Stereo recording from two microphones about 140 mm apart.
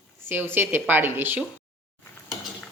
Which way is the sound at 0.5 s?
15° right (ahead or behind).